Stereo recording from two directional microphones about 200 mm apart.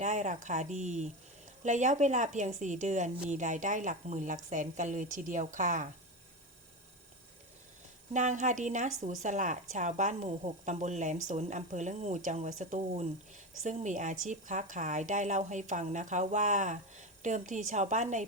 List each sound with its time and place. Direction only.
0.0 s a woman's voice: 40° right (ahead or behind)
8.1 s a woman's voice: 40° right (ahead or behind)